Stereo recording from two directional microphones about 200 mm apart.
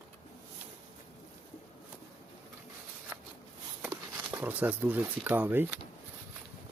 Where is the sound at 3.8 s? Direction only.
10° right (ahead or behind).